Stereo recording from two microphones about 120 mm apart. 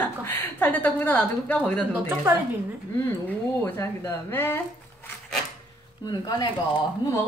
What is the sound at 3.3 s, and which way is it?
Speech, 15° left (ahead or behind).